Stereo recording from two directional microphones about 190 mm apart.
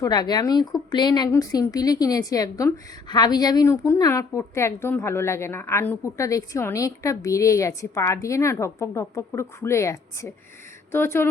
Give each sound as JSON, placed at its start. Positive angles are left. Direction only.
{"t": 0.0, "sound": "speech", "side_deg": 20}